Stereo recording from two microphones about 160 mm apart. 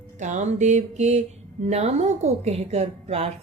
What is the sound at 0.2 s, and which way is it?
A woman's voice, 50° right (ahead or behind).